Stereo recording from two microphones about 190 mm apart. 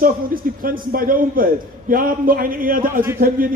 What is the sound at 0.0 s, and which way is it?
A man's voice, 45° right (ahead or behind).